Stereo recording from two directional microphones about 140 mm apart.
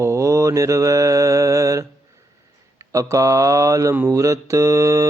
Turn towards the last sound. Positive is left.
turn(degrees=-20)  # may be behind; listen again after turning